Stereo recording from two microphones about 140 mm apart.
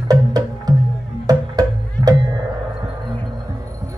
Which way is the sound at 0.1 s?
30° right (ahead or behind).